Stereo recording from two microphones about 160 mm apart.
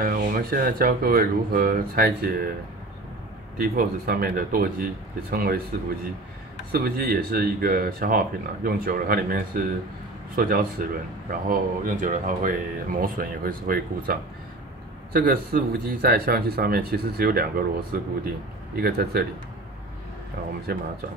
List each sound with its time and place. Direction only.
0.0 s a man's voice: 65° right (ahead or behind)
3.5 s a man's voice: 70° right (ahead or behind)
6.7 s a man's voice: 70° right (ahead or behind)
15.1 s speech: 60° right (ahead or behind)
20.7 s speech: 70° right (ahead or behind)